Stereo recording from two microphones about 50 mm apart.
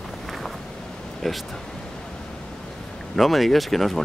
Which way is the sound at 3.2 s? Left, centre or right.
Centre.